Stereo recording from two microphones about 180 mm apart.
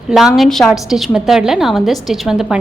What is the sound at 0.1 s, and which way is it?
A woman's voice, centre (ahead or behind).